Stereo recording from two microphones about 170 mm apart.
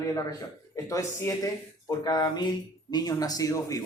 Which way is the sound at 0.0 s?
20° left (ahead or behind).